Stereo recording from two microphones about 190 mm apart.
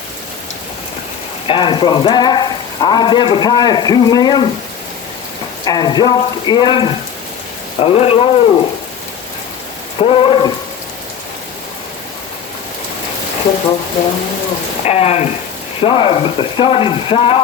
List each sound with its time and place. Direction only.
1.5 s speech: 25° left (ahead or behind)
5.6 s speech: 20° left (ahead or behind)
10.0 s speech: 30° left (ahead or behind)
14.8 s speech: 35° left (ahead or behind)